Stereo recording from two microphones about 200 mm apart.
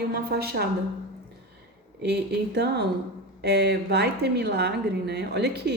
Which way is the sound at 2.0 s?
55° right (ahead or behind).